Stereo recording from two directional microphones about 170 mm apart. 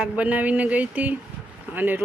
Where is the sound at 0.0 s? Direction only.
10° right (ahead or behind).